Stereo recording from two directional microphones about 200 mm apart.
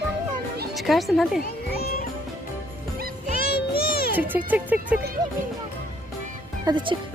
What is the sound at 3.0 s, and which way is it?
Music, 45° right (ahead or behind).